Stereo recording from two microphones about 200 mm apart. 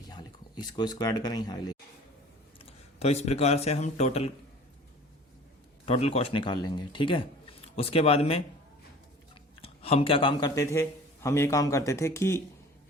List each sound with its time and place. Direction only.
0.1 s speech: 20° left (ahead or behind)
2.6 s speech: 30° left (ahead or behind)
5.8 s speech: 30° left (ahead or behind)
9.6 s a man's voice: 30° left (ahead or behind); by 12.4 s 15° left (ahead or behind)